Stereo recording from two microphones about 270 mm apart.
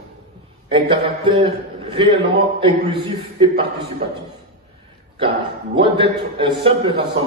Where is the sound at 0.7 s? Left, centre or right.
Centre.